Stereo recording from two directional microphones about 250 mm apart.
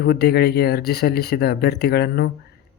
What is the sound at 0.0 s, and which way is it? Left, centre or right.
Speech, left.